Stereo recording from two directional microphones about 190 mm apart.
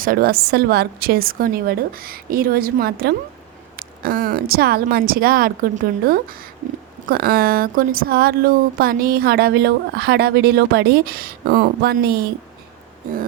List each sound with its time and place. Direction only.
0.0 s speech: 50° right (ahead or behind)